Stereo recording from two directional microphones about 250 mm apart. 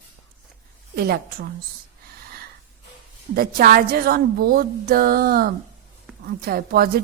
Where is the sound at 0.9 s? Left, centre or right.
Right.